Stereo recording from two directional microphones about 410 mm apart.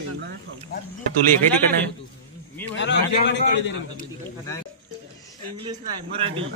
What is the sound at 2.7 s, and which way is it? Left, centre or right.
A man's voice, left.